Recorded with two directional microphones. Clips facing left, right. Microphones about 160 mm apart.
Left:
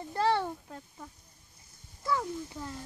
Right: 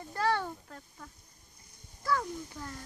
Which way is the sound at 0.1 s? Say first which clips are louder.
Left 2 dB; 25° left (ahead or behind).